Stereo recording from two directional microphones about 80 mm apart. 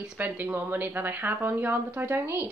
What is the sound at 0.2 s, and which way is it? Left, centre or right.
A woman's voice, right.